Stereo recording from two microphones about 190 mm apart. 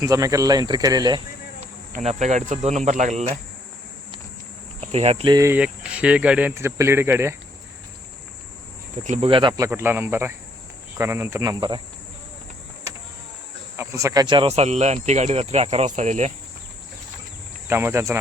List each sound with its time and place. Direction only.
0.0 s speech: 15° right (ahead or behind)
1.6 s speech: 40° right (ahead or behind)
4.8 s speech: 35° right (ahead or behind)
5.3 s speech: 15° right (ahead or behind)
5.5 s speech: 5° right (ahead or behind)
9.0 s speech: 35° right (ahead or behind)
9.6 s speech: 10° right (ahead or behind)
13.7 s speech: 15° right (ahead or behind); by 16.3 s 40° right (ahead or behind)
17.7 s speech: 10° right (ahead or behind)